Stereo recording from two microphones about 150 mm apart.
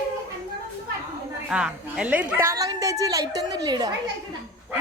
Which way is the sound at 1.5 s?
5° right (ahead or behind).